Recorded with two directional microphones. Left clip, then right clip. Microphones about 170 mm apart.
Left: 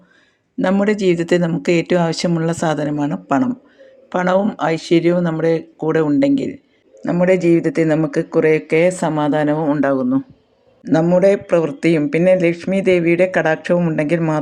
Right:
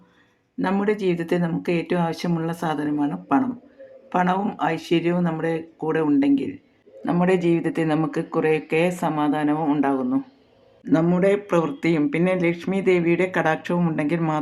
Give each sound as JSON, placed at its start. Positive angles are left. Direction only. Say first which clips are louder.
{"t": 0.6, "sound": "speech", "louder": "left 6 dB", "side_deg": 35}
{"t": 4.1, "sound": "speech", "louder": "left 6 dB", "side_deg": 30}